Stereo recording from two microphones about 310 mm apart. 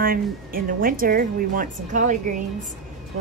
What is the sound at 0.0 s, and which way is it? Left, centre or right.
A woman's voice, right.